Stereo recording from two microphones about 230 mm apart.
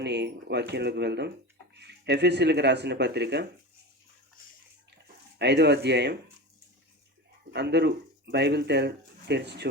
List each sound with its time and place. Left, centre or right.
0.0 s speech: right
5.4 s speech: right
7.5 s speech: right